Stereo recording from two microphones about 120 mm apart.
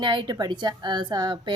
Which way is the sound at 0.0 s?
40° right (ahead or behind).